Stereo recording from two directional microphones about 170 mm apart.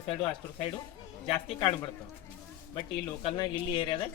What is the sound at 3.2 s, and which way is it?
Speech, 30° left (ahead or behind).